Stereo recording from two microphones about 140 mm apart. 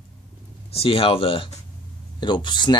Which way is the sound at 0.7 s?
40° left (ahead or behind).